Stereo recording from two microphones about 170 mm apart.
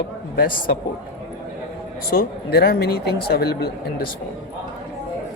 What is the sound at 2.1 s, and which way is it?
Speech, 65° left (ahead or behind).